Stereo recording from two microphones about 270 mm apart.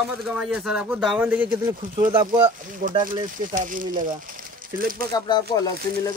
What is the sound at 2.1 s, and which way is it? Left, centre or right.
Speech, centre.